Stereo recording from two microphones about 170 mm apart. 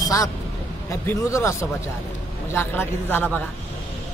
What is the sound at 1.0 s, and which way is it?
A man's voice, 15° left (ahead or behind).